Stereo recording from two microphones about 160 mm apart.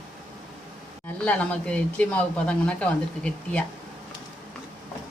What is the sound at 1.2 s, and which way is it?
Speech, 10° left (ahead or behind).